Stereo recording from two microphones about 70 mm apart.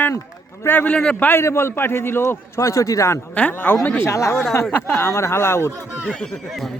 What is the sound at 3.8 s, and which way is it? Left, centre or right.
Speech, left.